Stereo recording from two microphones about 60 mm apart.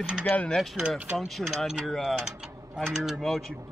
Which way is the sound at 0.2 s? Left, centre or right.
Left.